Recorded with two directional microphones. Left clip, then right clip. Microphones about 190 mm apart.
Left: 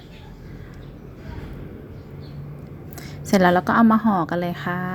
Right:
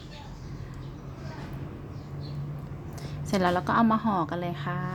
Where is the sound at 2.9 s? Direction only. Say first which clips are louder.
Left 9 dB; 25° left (ahead or behind).